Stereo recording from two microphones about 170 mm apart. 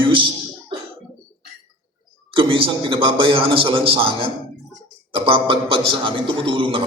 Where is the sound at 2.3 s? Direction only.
30° right (ahead or behind).